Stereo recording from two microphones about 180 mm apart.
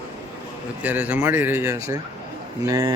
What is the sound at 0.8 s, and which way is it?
A man's voice, 10° right (ahead or behind).